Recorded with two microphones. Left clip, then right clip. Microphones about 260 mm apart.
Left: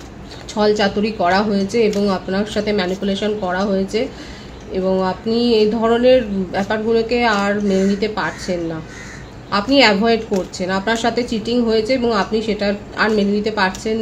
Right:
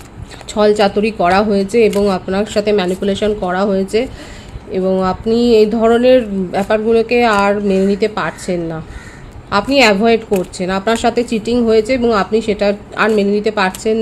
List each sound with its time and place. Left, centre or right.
0.5 s speech: right